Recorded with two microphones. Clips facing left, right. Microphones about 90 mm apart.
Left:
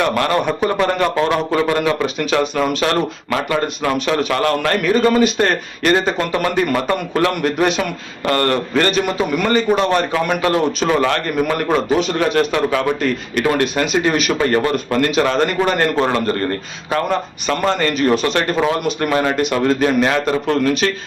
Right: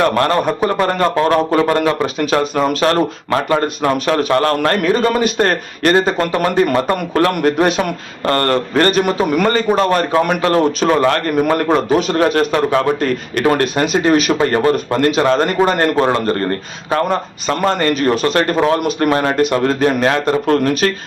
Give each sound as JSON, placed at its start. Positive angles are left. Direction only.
{"t": 0.0, "sound": "a man's voice", "side_deg": -35}
{"t": 16.0, "sound": "speech", "side_deg": -25}